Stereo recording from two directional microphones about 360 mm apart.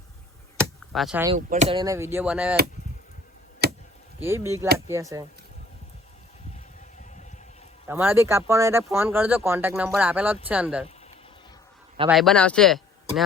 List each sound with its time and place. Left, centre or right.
0.6 s a sound: centre
1.4 s speech: centre
3.6 s a sound: right
4.2 s speech: centre
7.9 s speech: centre
11.9 s speech: centre